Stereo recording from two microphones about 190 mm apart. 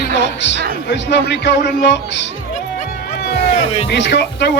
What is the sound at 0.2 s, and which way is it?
A man's voice, 65° left (ahead or behind).